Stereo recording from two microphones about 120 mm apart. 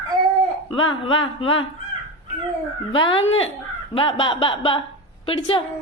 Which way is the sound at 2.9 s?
45° left (ahead or behind).